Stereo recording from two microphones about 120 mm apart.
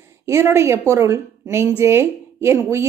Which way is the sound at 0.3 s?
20° right (ahead or behind).